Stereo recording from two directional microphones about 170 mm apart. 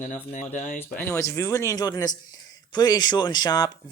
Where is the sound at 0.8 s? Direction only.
15° left (ahead or behind).